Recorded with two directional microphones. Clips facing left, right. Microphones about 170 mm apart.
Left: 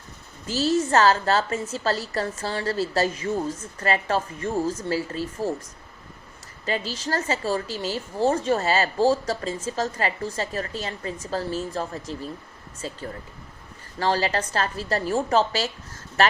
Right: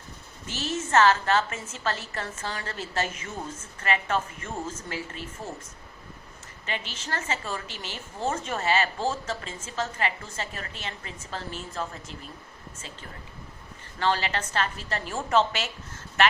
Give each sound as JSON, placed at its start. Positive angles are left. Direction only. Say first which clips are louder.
{"t": 0.4, "sound": "a woman's voice", "louder": "left 9 dB", "side_deg": 35}
{"t": 6.7, "sound": "a woman's voice", "louder": "left 7 dB", "side_deg": 35}
{"t": 14.0, "sound": "a woman's voice", "louder": "left 3 dB", "side_deg": 35}